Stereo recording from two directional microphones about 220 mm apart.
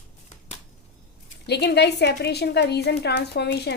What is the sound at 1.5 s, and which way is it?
A woman's voice, 50° left (ahead or behind).